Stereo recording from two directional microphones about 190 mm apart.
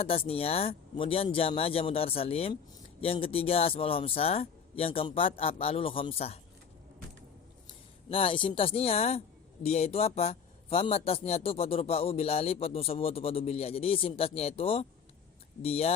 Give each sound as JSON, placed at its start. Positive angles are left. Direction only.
{"t": 0.0, "sound": "a man's voice", "side_deg": 30}
{"t": 8.1, "sound": "a man's voice", "side_deg": 30}